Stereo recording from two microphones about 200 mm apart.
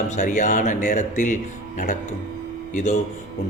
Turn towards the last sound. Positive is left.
turn(degrees=35)  # may be behind; listen again after turning